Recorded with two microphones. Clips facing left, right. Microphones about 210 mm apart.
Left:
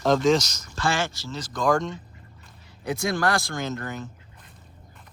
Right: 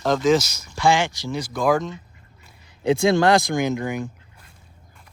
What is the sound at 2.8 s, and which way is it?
Speech, 25° right (ahead or behind).